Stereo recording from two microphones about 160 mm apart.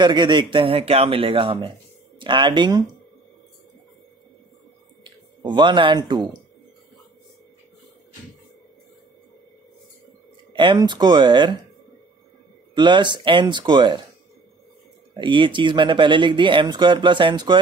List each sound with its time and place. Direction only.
0.0 s speech: 30° right (ahead or behind)
5.0 s speech: 30° right (ahead or behind)
10.5 s speech: 30° right (ahead or behind)
12.7 s speech: 30° right (ahead or behind)
15.1 s speech: 30° right (ahead or behind)